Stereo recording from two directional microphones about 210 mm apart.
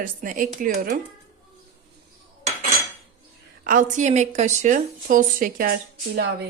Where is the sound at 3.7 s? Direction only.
40° right (ahead or behind).